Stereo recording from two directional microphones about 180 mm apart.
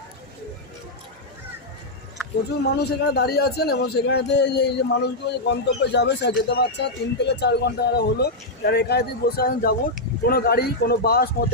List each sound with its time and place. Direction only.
2.6 s a man's voice: 65° left (ahead or behind)